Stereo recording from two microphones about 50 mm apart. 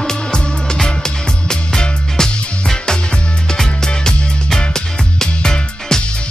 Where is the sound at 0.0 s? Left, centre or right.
Centre.